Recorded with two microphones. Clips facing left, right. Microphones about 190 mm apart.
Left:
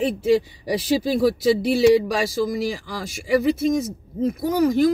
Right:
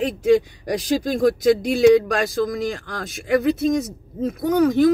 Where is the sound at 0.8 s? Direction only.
5° left (ahead or behind).